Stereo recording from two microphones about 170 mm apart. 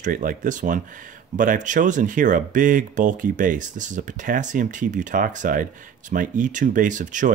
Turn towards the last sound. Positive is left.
turn(degrees=-50)  # may be behind; listen again after turning